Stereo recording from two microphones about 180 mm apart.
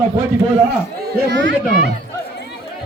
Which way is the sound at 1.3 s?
80° right.